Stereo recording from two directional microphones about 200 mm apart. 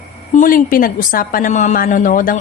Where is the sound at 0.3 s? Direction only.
45° left (ahead or behind).